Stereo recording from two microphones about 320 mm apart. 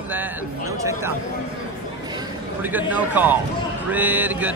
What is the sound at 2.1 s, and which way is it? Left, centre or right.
A man's voice, centre.